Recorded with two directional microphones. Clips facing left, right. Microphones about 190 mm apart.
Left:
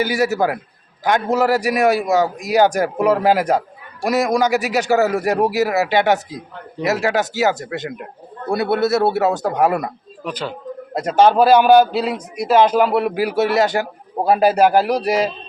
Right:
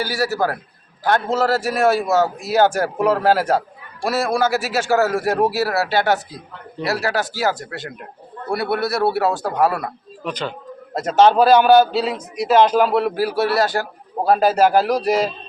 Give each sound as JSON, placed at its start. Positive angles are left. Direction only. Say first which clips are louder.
{"t": 0.0, "sound": "a man's voice", "louder": "left 3 dB", "side_deg": 20}
{"t": 10.2, "sound": "a man's voice", "louder": "left 1 dB", "side_deg": 5}